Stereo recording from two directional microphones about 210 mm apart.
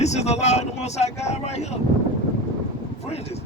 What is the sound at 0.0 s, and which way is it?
A man's voice, 30° left (ahead or behind).